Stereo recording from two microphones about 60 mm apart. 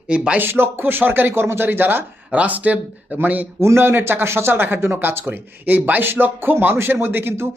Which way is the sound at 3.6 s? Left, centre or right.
Right.